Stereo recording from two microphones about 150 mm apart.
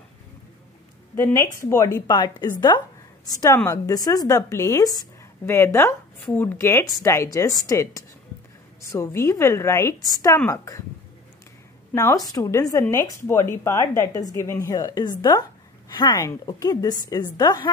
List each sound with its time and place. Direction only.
1.1 s a woman's voice: 20° left (ahead or behind)
11.9 s a woman's voice: 20° left (ahead or behind)